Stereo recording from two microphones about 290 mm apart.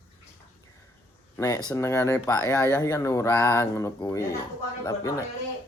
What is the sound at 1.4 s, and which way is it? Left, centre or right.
Speech, centre.